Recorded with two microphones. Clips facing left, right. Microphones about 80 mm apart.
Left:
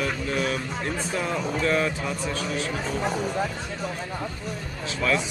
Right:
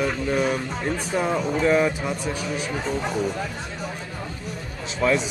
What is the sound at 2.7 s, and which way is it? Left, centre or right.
Speech, centre.